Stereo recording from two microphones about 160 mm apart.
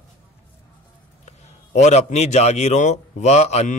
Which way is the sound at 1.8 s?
45° left (ahead or behind).